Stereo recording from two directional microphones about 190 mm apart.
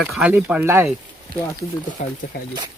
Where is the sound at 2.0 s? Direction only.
40° left (ahead or behind).